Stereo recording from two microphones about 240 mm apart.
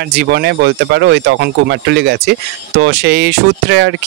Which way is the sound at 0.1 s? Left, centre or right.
Right.